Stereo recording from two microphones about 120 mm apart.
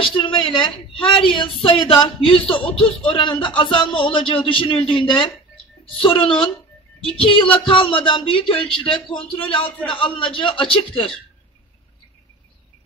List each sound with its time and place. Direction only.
0.0 s a woman's voice: 45° left (ahead or behind)